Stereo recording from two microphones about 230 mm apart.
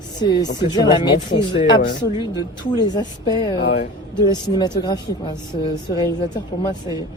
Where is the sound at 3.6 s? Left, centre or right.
Left.